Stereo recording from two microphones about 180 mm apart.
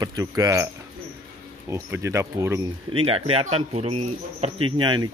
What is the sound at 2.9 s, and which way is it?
Speech, 30° right (ahead or behind).